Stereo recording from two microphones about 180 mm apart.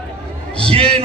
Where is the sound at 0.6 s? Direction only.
30° right (ahead or behind).